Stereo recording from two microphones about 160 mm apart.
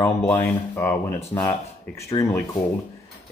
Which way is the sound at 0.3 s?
15° left (ahead or behind).